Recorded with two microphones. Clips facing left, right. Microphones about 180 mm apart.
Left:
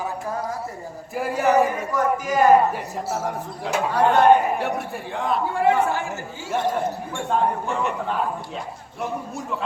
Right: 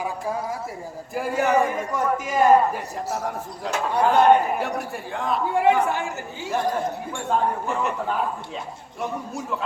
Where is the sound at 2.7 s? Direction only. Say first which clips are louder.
Left 1 dB; centre (ahead or behind).